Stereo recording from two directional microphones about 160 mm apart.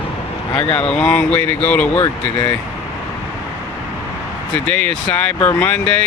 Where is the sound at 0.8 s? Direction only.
5° left (ahead or behind).